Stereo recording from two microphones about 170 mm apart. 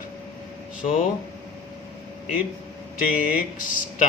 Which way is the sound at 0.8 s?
50° left (ahead or behind).